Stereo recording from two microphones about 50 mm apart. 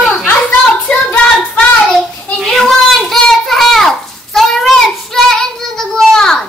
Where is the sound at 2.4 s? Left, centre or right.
Centre.